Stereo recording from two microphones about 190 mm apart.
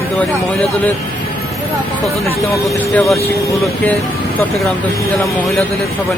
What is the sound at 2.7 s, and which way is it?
Speech, 5° left (ahead or behind).